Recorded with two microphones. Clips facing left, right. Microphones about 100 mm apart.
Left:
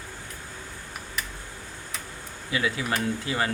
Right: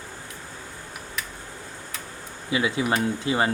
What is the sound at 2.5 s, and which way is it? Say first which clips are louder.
Speech: right 4 dB; 20° right (ahead or behind).